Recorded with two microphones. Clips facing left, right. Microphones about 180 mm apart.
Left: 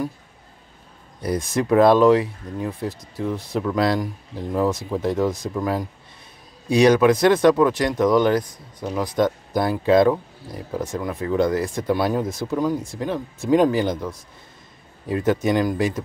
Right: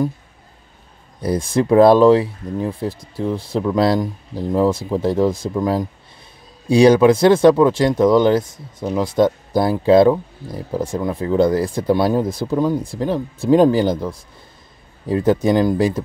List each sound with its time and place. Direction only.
1.2 s speech: 30° right (ahead or behind)